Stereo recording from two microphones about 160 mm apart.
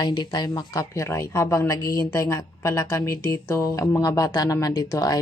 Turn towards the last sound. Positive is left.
turn(degrees=20)  # may be behind; listen again after turning